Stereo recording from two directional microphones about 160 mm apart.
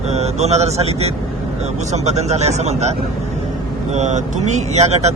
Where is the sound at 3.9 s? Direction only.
45° right (ahead or behind).